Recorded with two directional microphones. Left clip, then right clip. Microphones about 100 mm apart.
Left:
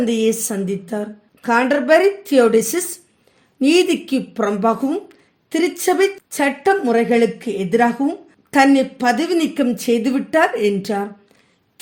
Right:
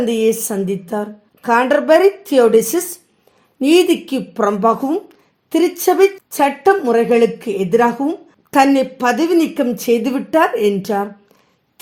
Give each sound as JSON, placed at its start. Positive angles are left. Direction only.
{"t": 0.0, "sound": "a woman's voice", "side_deg": -30}